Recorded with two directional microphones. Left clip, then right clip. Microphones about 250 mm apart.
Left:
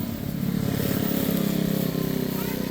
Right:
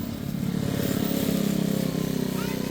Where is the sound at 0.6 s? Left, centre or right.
Centre.